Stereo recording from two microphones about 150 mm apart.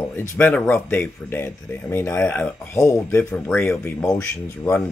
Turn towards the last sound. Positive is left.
turn(degrees=15)  # may be behind; listen again after turning